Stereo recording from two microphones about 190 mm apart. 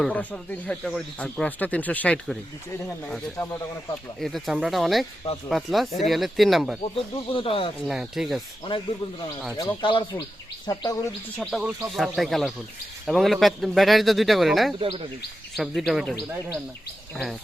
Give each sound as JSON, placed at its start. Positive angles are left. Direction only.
{"t": 0.0, "sound": "speech", "side_deg": 10}
{"t": 6.9, "sound": "speech", "side_deg": 30}
{"t": 7.9, "sound": "speech", "side_deg": 0}
{"t": 9.6, "sound": "speech", "side_deg": 25}
{"t": 11.3, "sound": "speech", "side_deg": 0}
{"t": 14.8, "sound": "speech", "side_deg": -30}
{"t": 15.5, "sound": "speech", "side_deg": 0}